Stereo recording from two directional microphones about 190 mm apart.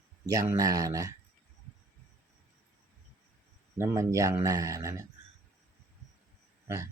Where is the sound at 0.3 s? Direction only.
15° right (ahead or behind).